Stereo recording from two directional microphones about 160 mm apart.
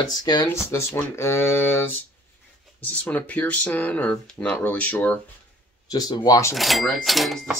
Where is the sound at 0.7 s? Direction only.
15° left (ahead or behind).